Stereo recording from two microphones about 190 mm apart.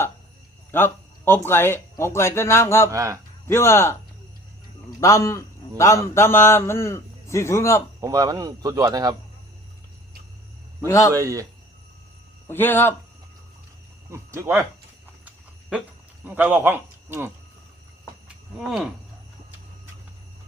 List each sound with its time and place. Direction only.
0.7 s a sound: 10° left (ahead or behind)
1.5 s a man's voice: 10° left (ahead or behind)
2.9 s speech: 15° right (ahead or behind)
3.4 s a man's voice: 15° left (ahead or behind)
4.9 s a man's voice: 15° left (ahead or behind)
8.0 s speech: 15° right (ahead or behind)
10.8 s a man's voice: 15° left (ahead or behind)
11.1 s speech: 15° right (ahead or behind)
12.5 s a man's voice: 10° left (ahead or behind)
14.1 s speech: 15° right (ahead or behind)
16.2 s speech: 10° right (ahead or behind)
18.5 s cricket: centre (ahead or behind)